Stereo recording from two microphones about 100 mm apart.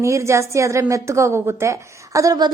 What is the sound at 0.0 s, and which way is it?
A woman's voice, 30° right (ahead or behind).